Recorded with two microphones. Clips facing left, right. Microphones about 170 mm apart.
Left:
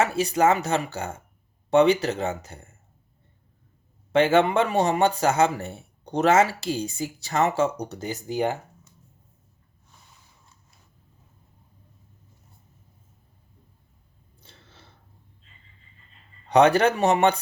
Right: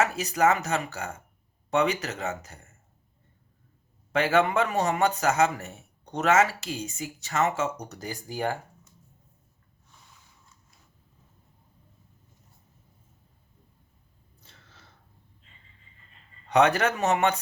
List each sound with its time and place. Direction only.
0.0 s a man's voice: 30° left (ahead or behind)
4.1 s a man's voice: 25° left (ahead or behind)
14.4 s chewing: 30° left (ahead or behind)
16.5 s a man's voice: 30° left (ahead or behind)